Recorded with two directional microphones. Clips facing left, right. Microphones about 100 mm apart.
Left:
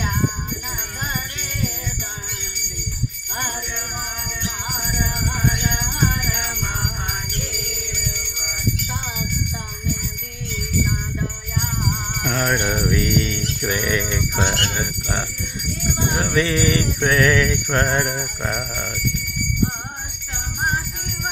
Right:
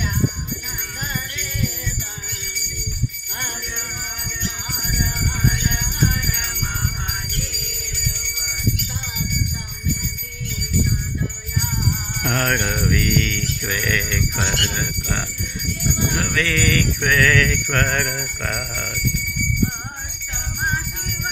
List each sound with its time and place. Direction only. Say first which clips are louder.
12.3 s jingle bell: even; 5° left (ahead or behind)
12.6 s jingle bell: left 1 dB; 20° left (ahead or behind)